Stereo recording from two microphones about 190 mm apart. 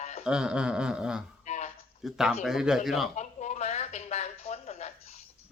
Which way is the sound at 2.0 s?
Centre (ahead or behind).